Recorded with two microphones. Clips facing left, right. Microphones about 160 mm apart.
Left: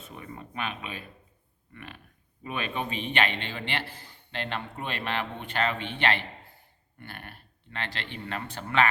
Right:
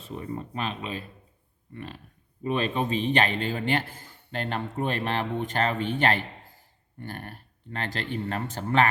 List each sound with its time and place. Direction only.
0.0 s a man's voice: 30° right (ahead or behind)